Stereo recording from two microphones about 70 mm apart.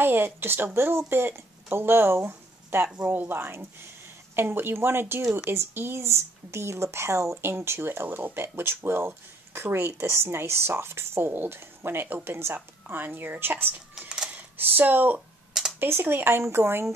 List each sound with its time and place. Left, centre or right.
0.0 s a woman's voice: right
13.9 s cash register: centre
14.3 s speech: right